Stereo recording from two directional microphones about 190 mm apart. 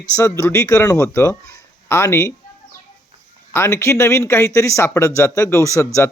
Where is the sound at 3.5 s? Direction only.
15° left (ahead or behind).